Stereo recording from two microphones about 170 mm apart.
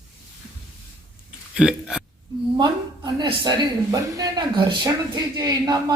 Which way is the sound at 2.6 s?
25° right (ahead or behind).